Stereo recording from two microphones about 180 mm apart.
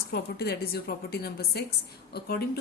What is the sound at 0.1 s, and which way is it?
Speech, 60° left (ahead or behind).